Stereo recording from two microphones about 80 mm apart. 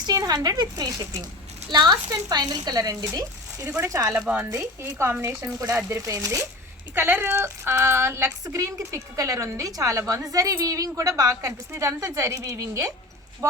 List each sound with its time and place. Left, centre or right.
0.0 s speech: right
4.5 s speech: right
6.9 s speech: right